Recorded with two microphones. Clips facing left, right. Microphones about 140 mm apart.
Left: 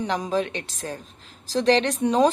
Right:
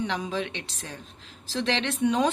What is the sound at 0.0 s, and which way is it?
Speech, 40° left (ahead or behind).